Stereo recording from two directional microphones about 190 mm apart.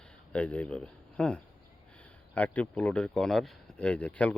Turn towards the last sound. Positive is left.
turn(degrees=5)  # may be behind; listen again after turning